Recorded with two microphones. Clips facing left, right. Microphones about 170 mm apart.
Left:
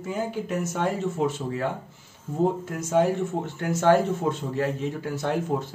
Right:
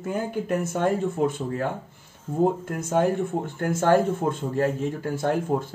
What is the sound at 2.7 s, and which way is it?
Speech, 55° right (ahead or behind).